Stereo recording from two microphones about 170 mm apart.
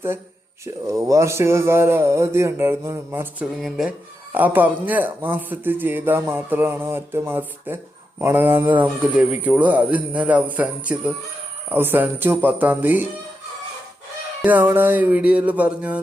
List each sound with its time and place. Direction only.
0.6 s a man's voice: 20° right (ahead or behind)
14.4 s a man's voice: 10° right (ahead or behind)